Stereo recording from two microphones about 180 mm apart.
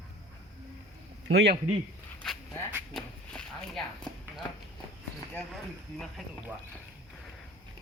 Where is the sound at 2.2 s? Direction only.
5° left (ahead or behind).